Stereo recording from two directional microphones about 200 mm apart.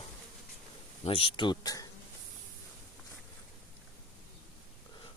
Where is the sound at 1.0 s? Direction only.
30° left (ahead or behind).